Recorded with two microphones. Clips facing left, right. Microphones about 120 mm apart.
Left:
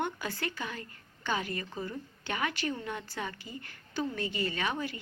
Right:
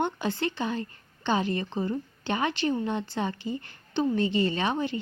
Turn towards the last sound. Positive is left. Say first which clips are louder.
# right 6 dB
turn(degrees=-25)  # may be behind; listen again after turning